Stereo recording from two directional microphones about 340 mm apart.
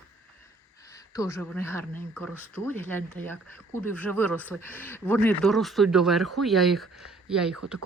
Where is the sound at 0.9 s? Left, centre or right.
Centre.